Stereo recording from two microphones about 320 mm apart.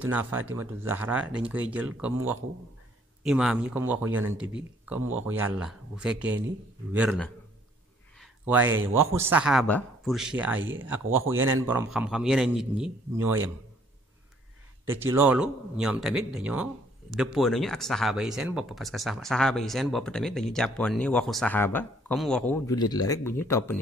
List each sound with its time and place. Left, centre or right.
0.0 s speech: centre
3.3 s speech: centre
8.2 s a sound: centre
9.1 s speech: centre
10.6 s speech: right
10.9 s speech: centre
14.9 s speech: centre